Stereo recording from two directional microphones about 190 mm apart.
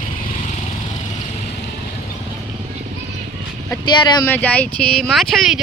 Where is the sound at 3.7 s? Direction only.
20° left (ahead or behind).